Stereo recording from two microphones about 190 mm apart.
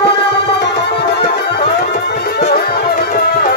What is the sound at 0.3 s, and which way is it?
Music, 65° left (ahead or behind).